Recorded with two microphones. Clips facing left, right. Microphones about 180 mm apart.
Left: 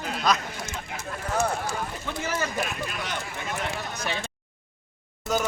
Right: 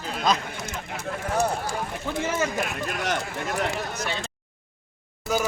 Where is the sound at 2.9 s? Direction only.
50° right (ahead or behind).